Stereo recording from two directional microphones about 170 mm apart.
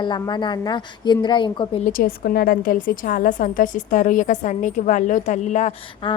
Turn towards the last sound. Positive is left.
turn(degrees=45)  # may be behind; listen again after turning